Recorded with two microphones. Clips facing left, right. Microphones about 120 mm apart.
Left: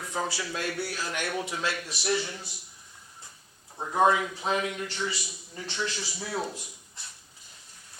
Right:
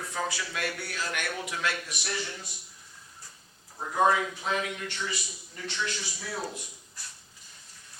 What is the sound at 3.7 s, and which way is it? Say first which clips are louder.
A man's voice: left 1 dB; 25° left (ahead or behind).